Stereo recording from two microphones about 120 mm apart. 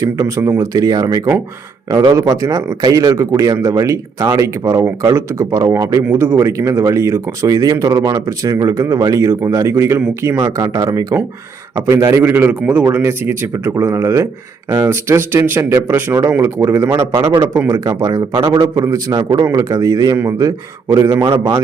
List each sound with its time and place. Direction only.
0.0 s speech: 25° right (ahead or behind)
6.1 s a man's voice: 15° right (ahead or behind)